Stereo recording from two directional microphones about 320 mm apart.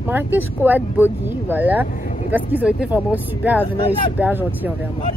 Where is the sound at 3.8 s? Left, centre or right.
Centre.